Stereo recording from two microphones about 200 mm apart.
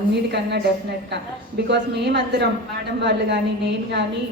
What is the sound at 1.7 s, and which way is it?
A woman's voice, 60° right (ahead or behind).